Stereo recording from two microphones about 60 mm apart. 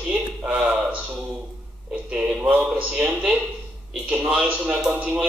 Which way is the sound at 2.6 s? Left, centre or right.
Centre.